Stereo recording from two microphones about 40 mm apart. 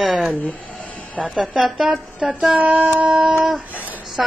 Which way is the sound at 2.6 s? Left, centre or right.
Right.